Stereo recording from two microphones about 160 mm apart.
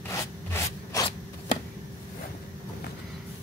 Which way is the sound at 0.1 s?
20° left (ahead or behind).